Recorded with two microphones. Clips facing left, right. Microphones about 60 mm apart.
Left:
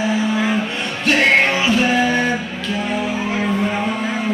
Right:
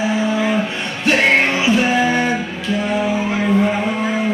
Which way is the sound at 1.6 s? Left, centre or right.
Centre.